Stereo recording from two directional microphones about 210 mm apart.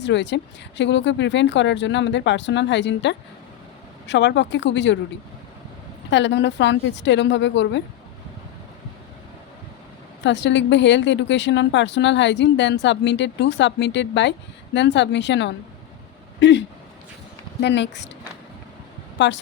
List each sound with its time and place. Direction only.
0.0 s a woman's voice: 60° left (ahead or behind)
6.1 s a woman's voice: 60° left (ahead or behind)
10.2 s a woman's voice: 60° left (ahead or behind)
19.2 s a woman's voice: 60° left (ahead or behind)